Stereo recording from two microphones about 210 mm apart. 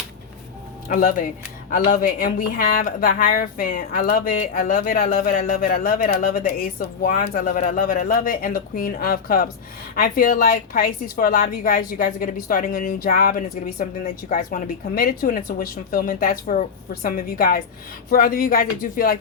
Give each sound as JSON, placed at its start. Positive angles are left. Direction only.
{"t": 0.9, "sound": "a woman's voice", "side_deg": 40}